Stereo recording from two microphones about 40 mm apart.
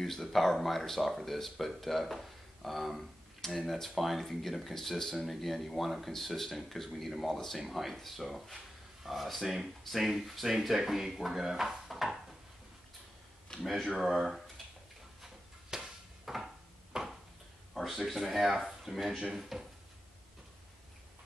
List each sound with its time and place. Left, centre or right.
0.0 s speech: centre
13.5 s speech: centre
13.9 s speech: centre
15.2 s a sound: centre
16.9 s a sound: centre
17.7 s speech: centre